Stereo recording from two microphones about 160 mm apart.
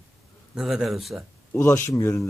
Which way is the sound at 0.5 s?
Centre (ahead or behind).